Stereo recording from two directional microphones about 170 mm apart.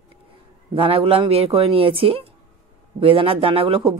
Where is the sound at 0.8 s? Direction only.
30° right (ahead or behind).